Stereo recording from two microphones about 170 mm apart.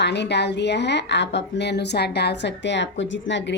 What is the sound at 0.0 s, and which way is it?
A woman's voice, 90° left.